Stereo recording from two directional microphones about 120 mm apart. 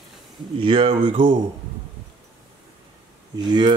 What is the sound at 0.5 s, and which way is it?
Speech, 45° right (ahead or behind).